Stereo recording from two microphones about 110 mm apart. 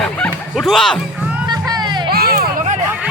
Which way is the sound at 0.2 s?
5° left (ahead or behind).